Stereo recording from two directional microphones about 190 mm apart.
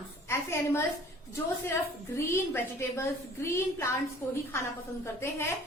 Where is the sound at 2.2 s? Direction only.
15° left (ahead or behind).